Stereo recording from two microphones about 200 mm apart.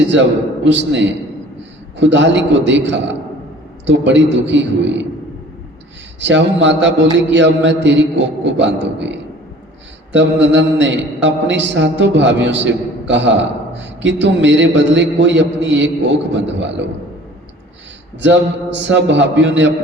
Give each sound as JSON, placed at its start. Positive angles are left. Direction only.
{"t": 0.1, "sound": "a man's voice", "side_deg": -65}
{"t": 6.1, "sound": "a man's voice", "side_deg": -65}
{"t": 18.2, "sound": "a man's voice", "side_deg": -65}